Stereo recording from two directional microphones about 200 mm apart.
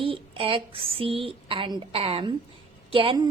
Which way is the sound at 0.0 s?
25° right (ahead or behind).